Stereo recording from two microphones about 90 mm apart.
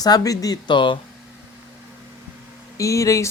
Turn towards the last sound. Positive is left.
turn(degrees=35)  # may be behind; listen again after turning